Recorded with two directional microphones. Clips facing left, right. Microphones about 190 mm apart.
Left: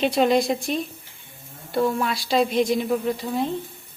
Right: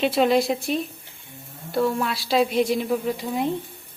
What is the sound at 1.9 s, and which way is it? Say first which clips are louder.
A woman's voice: even; centre (ahead or behind).